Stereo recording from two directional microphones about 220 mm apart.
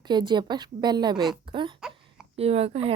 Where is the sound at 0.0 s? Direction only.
20° right (ahead or behind).